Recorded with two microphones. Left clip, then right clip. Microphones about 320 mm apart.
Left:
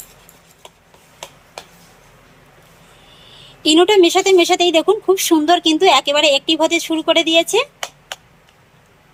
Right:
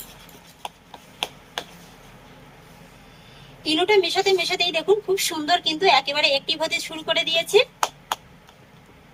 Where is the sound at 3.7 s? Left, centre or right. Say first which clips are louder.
Left 8 dB; centre.